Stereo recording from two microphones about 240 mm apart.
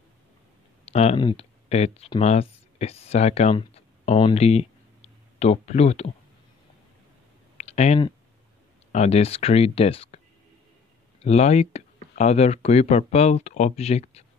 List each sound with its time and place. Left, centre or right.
0.8 s speech: left
7.5 s a sound: left
8.9 s speech: left
11.2 s speech: left